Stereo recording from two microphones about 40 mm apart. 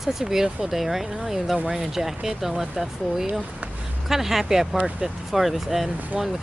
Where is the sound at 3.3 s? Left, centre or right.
Right.